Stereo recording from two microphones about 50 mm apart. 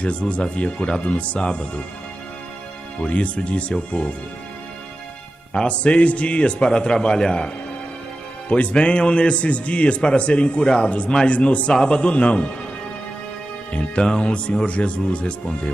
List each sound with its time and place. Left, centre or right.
0.0 s a man's voice: left
3.0 s a man's voice: left
5.5 s a man's voice: left
13.7 s a man's voice: centre